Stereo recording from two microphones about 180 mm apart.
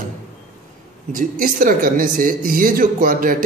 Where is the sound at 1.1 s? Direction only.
50° right (ahead or behind).